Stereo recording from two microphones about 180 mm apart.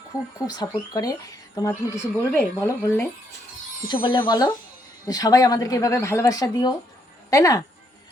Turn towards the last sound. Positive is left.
turn(degrees=20)  # may be behind; listen again after turning